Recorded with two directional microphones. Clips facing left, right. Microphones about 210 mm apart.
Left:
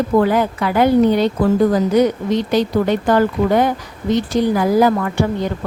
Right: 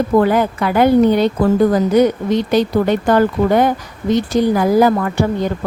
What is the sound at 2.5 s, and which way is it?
A woman's voice, 55° right (ahead or behind).